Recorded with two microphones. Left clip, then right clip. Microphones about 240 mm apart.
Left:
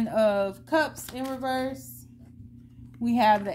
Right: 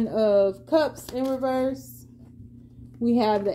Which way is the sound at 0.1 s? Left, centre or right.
Left.